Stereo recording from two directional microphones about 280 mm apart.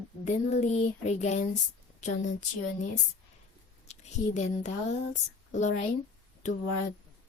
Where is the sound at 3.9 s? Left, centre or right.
Left.